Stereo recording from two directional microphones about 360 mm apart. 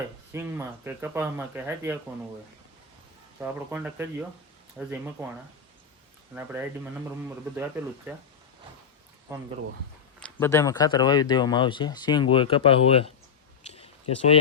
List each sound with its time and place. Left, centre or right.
0.3 s speech: centre
3.4 s speech: centre
8.1 s speech: centre
10.2 s speech: centre
13.7 s a sound: centre